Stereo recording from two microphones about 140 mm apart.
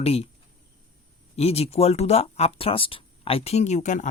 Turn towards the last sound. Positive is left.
turn(degrees=60)  # may be behind; listen again after turning